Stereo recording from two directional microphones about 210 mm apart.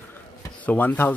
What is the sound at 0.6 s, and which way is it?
Speech, 5° left (ahead or behind).